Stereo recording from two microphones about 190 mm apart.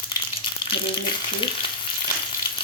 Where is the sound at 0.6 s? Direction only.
25° left (ahead or behind).